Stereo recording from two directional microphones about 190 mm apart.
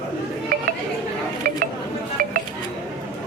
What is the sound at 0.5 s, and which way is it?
Chatter, 45° right (ahead or behind).